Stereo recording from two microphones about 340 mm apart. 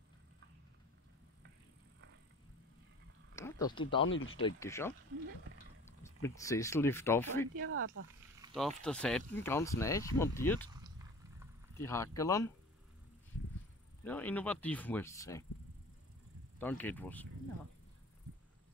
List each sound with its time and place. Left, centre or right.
3.3 s a sound: centre
4.0 s speech: left
4.4 s speech: centre
6.2 s speech: centre
7.5 s speech: right
8.5 s speech: centre
11.8 s speech: centre
14.0 s speech: centre
16.5 s speech: centre